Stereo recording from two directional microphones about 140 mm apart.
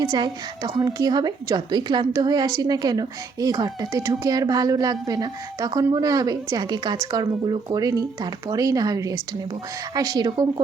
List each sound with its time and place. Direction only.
0.0 s speech: 30° right (ahead or behind)